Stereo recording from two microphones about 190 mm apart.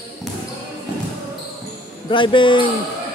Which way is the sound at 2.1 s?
25° left (ahead or behind).